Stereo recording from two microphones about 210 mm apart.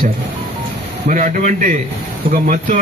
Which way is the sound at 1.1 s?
35° right (ahead or behind).